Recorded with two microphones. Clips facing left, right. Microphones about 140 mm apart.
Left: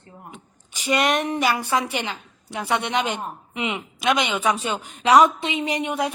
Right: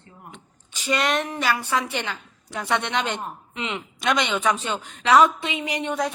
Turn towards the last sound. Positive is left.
turn(degrees=10)  # may be behind; listen again after turning